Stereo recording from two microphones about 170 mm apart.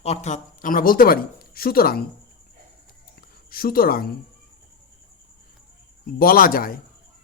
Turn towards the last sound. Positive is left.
turn(degrees=60)  # may be behind; listen again after turning